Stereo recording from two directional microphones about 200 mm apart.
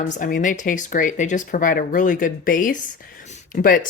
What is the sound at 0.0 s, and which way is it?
Speech, 40° left (ahead or behind).